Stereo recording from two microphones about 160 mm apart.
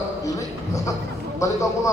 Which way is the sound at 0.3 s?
20° left (ahead or behind).